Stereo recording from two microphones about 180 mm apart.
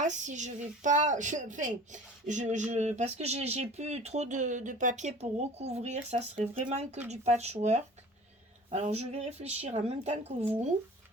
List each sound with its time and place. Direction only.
0.0 s a woman's voice: 45° right (ahead or behind)